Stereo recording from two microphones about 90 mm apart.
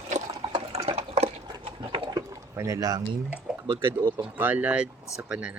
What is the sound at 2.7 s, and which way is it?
Speech, 45° right (ahead or behind).